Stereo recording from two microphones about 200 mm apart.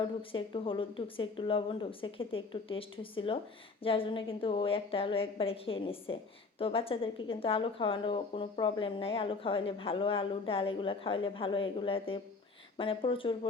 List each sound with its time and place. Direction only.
0.0 s a woman's voice: 25° left (ahead or behind)